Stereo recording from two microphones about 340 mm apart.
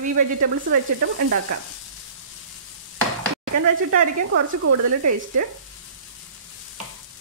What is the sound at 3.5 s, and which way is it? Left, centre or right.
Speech, right.